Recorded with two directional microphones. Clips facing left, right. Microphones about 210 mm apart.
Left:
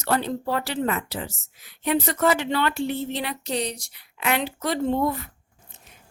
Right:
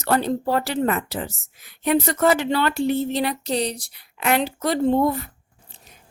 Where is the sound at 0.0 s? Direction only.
45° right (ahead or behind).